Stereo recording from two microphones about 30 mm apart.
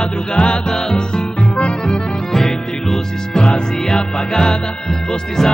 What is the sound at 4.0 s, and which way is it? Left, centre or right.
Music, left.